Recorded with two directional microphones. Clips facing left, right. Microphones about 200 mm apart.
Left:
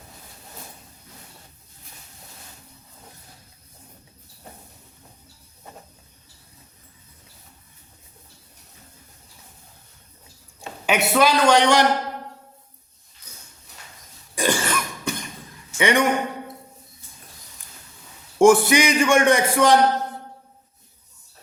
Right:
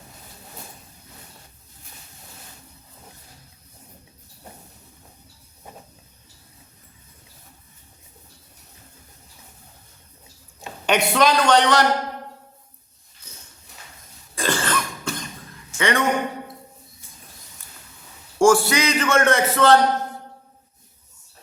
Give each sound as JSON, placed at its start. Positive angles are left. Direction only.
{"t": 10.8, "sound": "a man's voice", "side_deg": 5}
{"t": 14.3, "sound": "cough", "side_deg": 15}
{"t": 15.8, "sound": "speech", "side_deg": 15}
{"t": 18.3, "sound": "a man's voice", "side_deg": 20}